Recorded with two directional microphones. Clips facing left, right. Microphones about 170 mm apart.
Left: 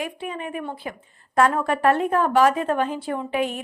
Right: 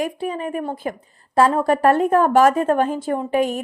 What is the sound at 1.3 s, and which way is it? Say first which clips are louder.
A woman's voice: right 4 dB; 30° right (ahead or behind).